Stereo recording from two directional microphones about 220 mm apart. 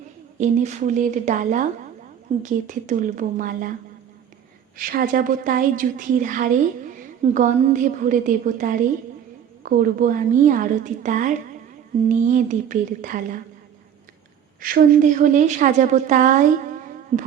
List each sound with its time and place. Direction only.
0.3 s a woman's voice: 30° right (ahead or behind)
4.8 s a woman's voice: 40° right (ahead or behind)
14.6 s a woman's voice: 40° right (ahead or behind)